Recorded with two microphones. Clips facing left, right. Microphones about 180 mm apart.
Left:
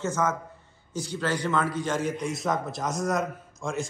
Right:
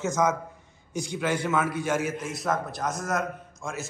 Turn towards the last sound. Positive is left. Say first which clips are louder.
# left 4 dB
turn(degrees=0)  # may be behind; listen again after turning